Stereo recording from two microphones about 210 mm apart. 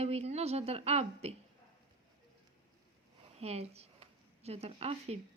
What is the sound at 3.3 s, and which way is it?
Speech, 30° right (ahead or behind).